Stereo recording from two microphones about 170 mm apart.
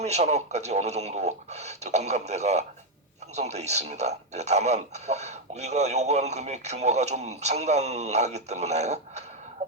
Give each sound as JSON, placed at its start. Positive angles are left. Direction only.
{"t": 0.0, "sound": "speech", "side_deg": -40}
{"t": 9.6, "sound": "music", "side_deg": -35}